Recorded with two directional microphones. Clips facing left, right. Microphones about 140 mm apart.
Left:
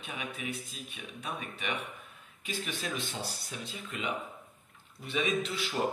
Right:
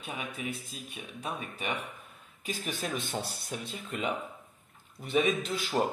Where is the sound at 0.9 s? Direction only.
35° right (ahead or behind).